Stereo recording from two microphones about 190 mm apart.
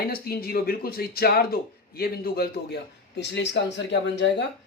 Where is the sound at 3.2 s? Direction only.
65° left (ahead or behind).